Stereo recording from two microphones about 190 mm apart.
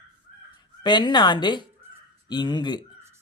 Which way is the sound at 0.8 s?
25° left (ahead or behind).